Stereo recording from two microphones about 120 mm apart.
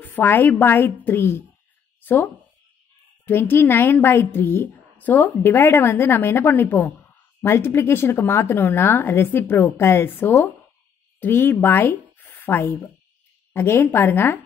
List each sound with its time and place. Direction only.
0.0 s a woman's voice: 15° left (ahead or behind)
2.0 s a sound: 15° left (ahead or behind)
3.3 s a woman's voice: 20° left (ahead or behind)